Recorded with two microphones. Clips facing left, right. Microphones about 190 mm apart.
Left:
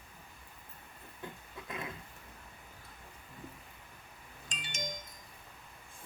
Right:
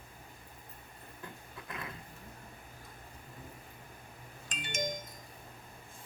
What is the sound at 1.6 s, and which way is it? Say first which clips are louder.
Roaring cats: left 2 dB; 20° left (ahead or behind).